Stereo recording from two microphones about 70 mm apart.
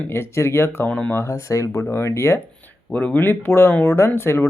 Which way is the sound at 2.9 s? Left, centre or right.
Left.